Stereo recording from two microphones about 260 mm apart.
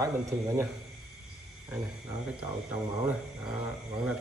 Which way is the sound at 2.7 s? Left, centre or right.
Centre.